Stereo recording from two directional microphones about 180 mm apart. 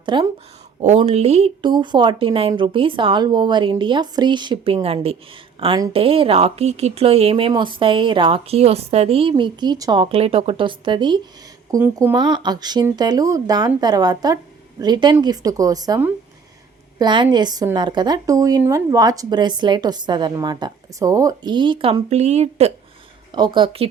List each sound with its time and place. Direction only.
0.0 s a woman's voice: 25° right (ahead or behind)
0.8 s a woman's voice: 40° right (ahead or behind)
11.7 s speech: 15° right (ahead or behind); by 22.7 s 35° right (ahead or behind)
23.3 s speech: 25° right (ahead or behind)